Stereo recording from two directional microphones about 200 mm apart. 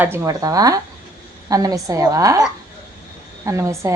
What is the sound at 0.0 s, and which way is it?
A woman's voice, 10° right (ahead or behind).